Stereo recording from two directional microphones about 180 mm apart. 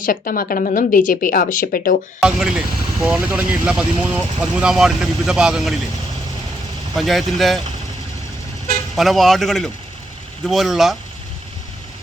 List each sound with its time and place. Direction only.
0.0 s speech: 50° left (ahead or behind)
2.2 s speech: 5° right (ahead or behind)
6.9 s speech: centre (ahead or behind)
9.0 s speech: centre (ahead or behind)